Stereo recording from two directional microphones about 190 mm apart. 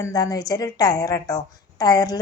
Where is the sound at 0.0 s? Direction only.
20° left (ahead or behind).